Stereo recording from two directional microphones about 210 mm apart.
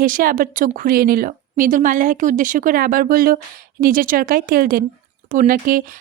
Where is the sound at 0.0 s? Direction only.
40° right (ahead or behind).